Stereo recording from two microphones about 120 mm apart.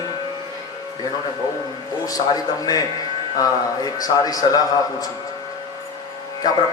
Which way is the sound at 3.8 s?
30° left (ahead or behind).